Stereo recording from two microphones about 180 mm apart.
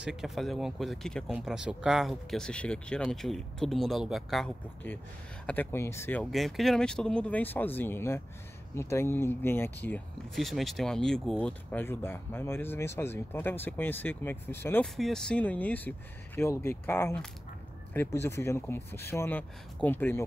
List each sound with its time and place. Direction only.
0.0 s speech: 5° right (ahead or behind); by 6.2 s 15° left (ahead or behind)
6.3 s speech: centre (ahead or behind)
15.0 s speech: centre (ahead or behind)